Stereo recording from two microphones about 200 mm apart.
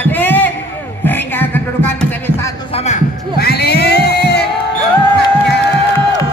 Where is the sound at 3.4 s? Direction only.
55° left (ahead or behind).